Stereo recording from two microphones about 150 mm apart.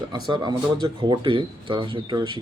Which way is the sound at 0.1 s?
30° right (ahead or behind).